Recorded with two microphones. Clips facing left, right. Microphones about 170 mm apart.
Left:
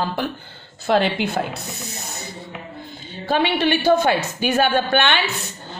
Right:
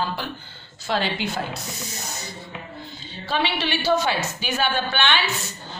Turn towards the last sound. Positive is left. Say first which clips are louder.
# left 4 dB
turn(degrees=55)  # may be behind; listen again after turning